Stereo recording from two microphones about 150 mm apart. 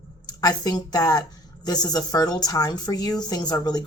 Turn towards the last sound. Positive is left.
turn(degrees=25)  # may be behind; listen again after turning